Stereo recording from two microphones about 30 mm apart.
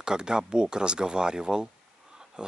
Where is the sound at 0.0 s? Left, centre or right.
Right.